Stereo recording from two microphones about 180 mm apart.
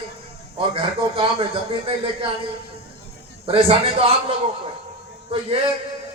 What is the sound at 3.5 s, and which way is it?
Speech, 30° right (ahead or behind).